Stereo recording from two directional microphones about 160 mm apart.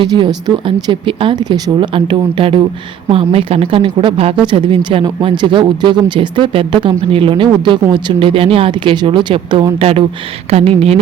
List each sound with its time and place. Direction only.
0.0 s speech: 25° right (ahead or behind)